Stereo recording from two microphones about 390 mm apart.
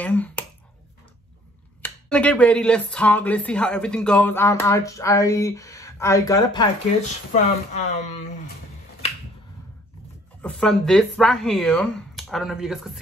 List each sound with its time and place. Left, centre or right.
0.0 s finger snapping: centre
1.8 s speech: centre
10.4 s speech: centre